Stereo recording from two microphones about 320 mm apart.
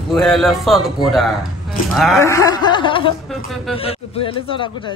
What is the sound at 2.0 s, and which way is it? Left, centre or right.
Speech, centre.